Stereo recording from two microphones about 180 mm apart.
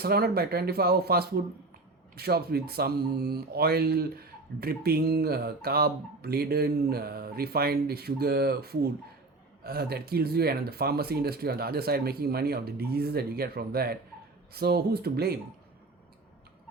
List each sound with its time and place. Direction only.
0.0 s speech: 60° right (ahead or behind)